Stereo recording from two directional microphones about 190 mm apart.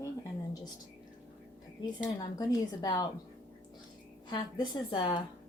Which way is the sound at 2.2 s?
20° left (ahead or behind).